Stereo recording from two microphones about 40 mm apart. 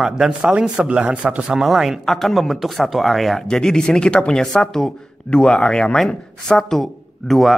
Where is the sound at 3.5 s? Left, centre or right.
Centre.